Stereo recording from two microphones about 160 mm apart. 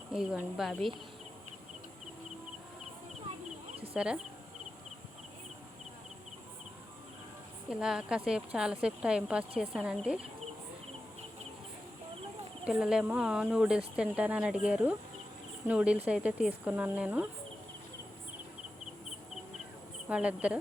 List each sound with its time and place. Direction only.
0.1 s speech: 5° right (ahead or behind)
3.9 s speech: 5° right (ahead or behind)
7.7 s speech: 5° right (ahead or behind)
12.6 s speech: 5° right (ahead or behind)
20.1 s speech: 5° right (ahead or behind)